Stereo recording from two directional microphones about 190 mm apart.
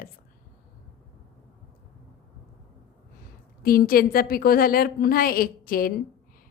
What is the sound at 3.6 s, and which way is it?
A woman's voice, 50° left (ahead or behind).